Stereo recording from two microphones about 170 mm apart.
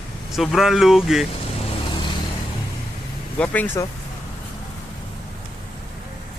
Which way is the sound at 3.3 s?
10° left (ahead or behind).